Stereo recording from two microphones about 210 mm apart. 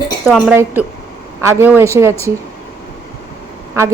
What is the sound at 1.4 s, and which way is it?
Speech, 10° right (ahead or behind).